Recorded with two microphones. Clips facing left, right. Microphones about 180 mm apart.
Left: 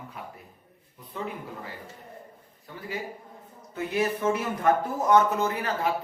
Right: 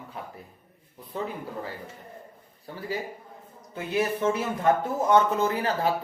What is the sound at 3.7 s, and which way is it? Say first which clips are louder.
Speech: even; 30° right (ahead or behind).